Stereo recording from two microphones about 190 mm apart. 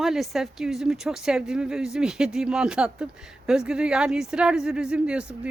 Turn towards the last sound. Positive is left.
turn(degrees=-5)  # may be behind; listen again after turning